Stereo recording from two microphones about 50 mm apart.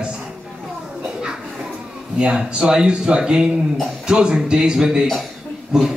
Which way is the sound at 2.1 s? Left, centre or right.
Centre.